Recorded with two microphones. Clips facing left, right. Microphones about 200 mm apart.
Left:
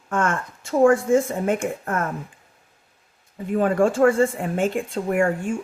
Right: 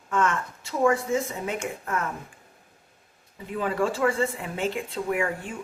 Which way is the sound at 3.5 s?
50° left (ahead or behind).